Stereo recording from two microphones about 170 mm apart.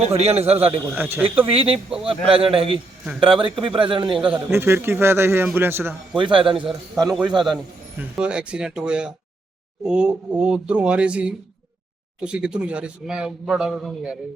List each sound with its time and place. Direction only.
0.0 s a man's voice: 40° right (ahead or behind)
0.9 s a man's voice: 10° right (ahead or behind)
1.4 s a man's voice: 35° right (ahead or behind)
4.3 s a man's voice: 15° right (ahead or behind)
6.1 s a man's voice: 30° right (ahead or behind)
7.9 s a man's voice: 5° right (ahead or behind)